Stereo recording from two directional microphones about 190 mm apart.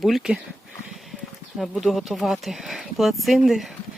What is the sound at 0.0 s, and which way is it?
Speech, centre (ahead or behind).